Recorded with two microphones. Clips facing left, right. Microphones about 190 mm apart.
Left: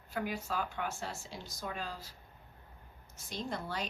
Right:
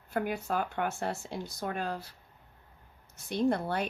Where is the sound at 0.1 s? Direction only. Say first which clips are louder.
Right 5 dB; 55° right (ahead or behind).